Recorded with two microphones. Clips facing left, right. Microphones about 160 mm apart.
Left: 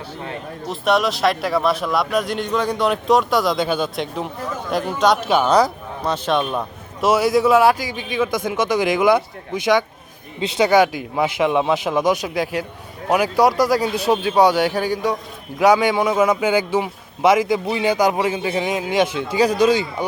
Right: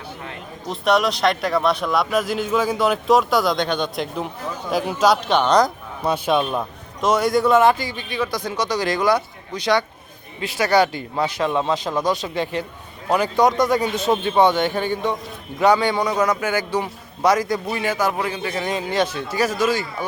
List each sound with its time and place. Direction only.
0.7 s a man's voice: centre (ahead or behind)
6.1 s a man's voice: 10° right (ahead or behind); by 8.4 s 15° left (ahead or behind)
10.4 s speech: 20° left (ahead or behind)
10.7 s a man's voice: 5° left (ahead or behind)